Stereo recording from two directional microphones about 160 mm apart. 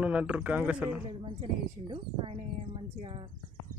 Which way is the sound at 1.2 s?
35° right (ahead or behind).